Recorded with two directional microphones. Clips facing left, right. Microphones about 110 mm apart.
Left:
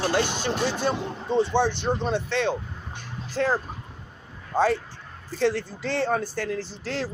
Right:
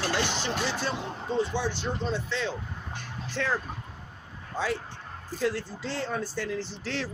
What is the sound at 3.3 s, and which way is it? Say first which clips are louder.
Speech: left 5 dB; 40° left (ahead or behind).